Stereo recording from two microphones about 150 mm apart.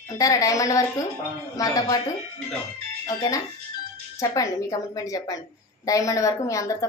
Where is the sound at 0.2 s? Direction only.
20° left (ahead or behind).